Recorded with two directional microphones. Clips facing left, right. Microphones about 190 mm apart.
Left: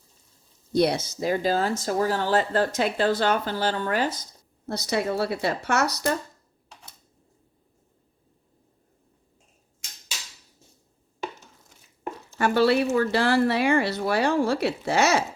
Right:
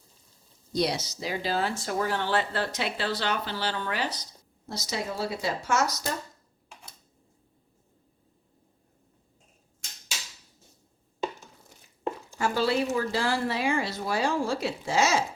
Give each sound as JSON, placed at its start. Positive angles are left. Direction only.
{"t": 0.7, "sound": "speech", "side_deg": 55}
{"t": 12.4, "sound": "speech", "side_deg": 65}